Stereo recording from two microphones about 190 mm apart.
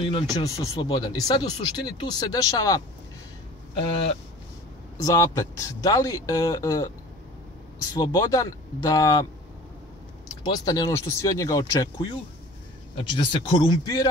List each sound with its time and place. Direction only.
0.0 s speech: 25° left (ahead or behind)
3.8 s speech: 30° left (ahead or behind)
5.0 s speech: 15° left (ahead or behind)
7.9 s speech: 20° left (ahead or behind)
10.4 s speech: 20° left (ahead or behind)